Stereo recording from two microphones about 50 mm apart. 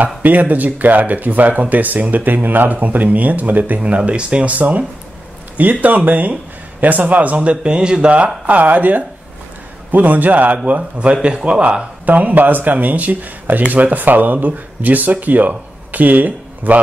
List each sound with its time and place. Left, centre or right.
0.2 s speech: right
12.1 s speech: right